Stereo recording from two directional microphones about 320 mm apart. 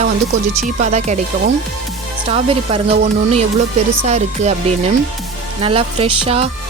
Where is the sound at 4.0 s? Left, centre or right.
Right.